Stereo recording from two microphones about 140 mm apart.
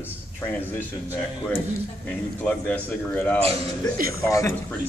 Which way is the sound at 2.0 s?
10° left (ahead or behind).